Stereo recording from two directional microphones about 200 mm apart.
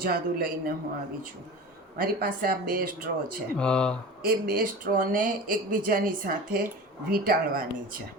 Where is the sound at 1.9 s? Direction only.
45° right (ahead or behind).